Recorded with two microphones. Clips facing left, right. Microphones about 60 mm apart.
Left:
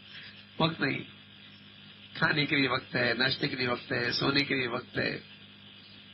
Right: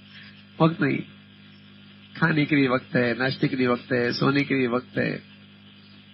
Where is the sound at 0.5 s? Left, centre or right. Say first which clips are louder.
Right 8 dB; centre.